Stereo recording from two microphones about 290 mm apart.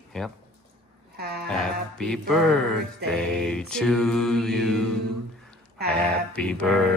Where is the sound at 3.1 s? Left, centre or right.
Centre.